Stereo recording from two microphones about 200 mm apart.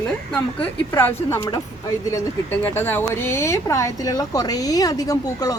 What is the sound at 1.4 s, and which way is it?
A woman's voice, 20° left (ahead or behind).